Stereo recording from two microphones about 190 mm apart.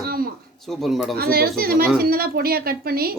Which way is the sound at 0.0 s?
50° right (ahead or behind).